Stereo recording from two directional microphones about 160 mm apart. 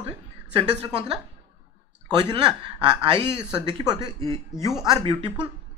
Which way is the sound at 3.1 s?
25° right (ahead or behind).